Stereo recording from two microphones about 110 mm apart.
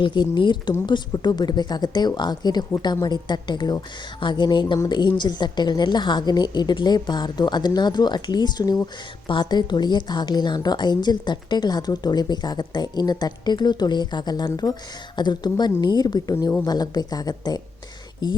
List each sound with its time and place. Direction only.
0.0 s a woman's voice: 45° left (ahead or behind)
9.2 s speech: 45° left (ahead or behind)
16.3 s speech: 25° left (ahead or behind)
16.6 s speech: 35° left (ahead or behind)